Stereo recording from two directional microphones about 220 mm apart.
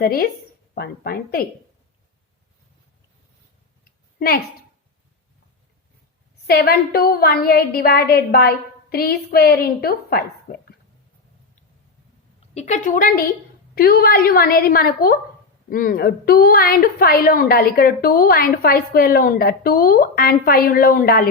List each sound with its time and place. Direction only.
0.0 s a woman's voice: 40° left (ahead or behind)
3.8 s a sound: 45° left (ahead or behind)
6.5 s a woman's voice: 45° left (ahead or behind)
12.4 s a woman's voice: 30° left (ahead or behind)